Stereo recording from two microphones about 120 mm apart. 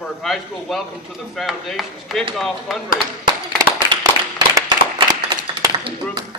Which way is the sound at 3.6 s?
30° right (ahead or behind).